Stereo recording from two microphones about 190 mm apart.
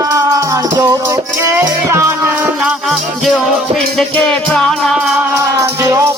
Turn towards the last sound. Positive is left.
turn(degrees=-15)  # may be behind; listen again after turning